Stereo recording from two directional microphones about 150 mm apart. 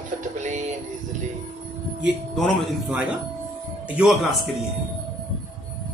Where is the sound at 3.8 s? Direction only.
5° right (ahead or behind).